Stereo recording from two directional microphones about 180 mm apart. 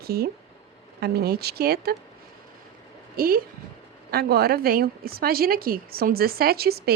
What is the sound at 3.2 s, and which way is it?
Speech, 55° right (ahead or behind).